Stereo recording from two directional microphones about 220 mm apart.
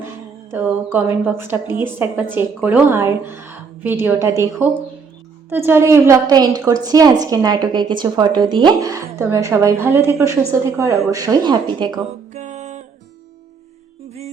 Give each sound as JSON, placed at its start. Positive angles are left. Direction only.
{"t": 0.5, "sound": "a woman's voice", "side_deg": -10}
{"t": 12.3, "sound": "music", "side_deg": -30}